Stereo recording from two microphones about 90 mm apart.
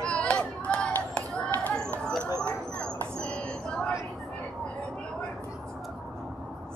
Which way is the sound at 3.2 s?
10° left (ahead or behind).